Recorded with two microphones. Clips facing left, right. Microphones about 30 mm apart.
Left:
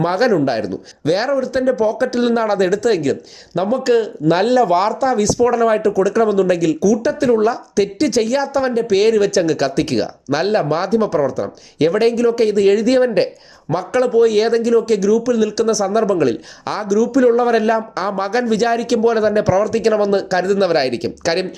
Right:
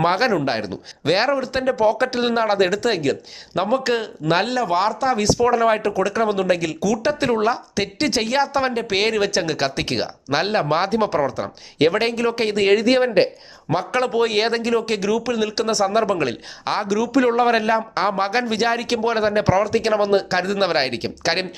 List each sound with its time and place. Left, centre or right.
0.0 s speech: right
2.1 s speech: right
4.4 s speech: centre
5.0 s speech: right
6.8 s speech: right
14.1 s speech: right
16.9 s speech: right; by 21.4 s centre